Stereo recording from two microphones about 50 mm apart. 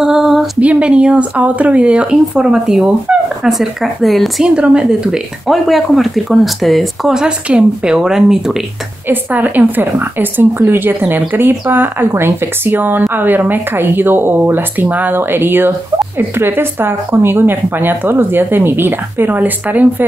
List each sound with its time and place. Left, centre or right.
0.0 s a sound: centre
0.6 s speech: right
3.5 s speech: centre
4.6 s speech: centre
5.5 s speech: centre
7.2 s a woman's voice: right
9.0 s a woman's voice: right
12.1 s speech: right